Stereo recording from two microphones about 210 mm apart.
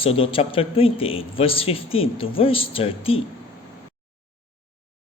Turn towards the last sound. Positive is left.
turn(degrees=25)  # may be behind; listen again after turning